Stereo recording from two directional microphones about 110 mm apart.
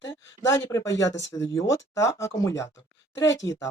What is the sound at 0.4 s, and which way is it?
Speech, 25° left (ahead or behind).